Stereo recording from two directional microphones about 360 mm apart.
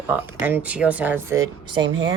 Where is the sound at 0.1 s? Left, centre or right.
Centre.